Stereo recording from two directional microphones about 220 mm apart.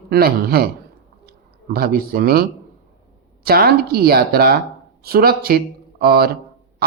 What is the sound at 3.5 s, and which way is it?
Speech, 45° right (ahead or behind).